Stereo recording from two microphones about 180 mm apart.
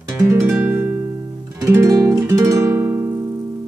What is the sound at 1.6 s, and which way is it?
Music, 15° right (ahead or behind).